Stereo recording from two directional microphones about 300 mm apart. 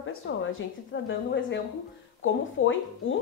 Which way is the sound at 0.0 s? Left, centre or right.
Left.